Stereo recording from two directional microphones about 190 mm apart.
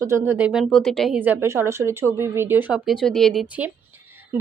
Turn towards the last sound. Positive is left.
turn(degrees=-10)  # may be behind; listen again after turning